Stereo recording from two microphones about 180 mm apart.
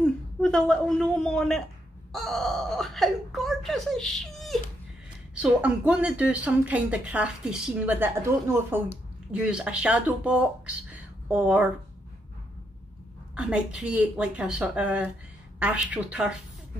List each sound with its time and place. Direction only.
0.0 s a woman's voice: 5° left (ahead or behind)
10.9 s a sound: 5° right (ahead or behind)
13.3 s speech: 5° right (ahead or behind)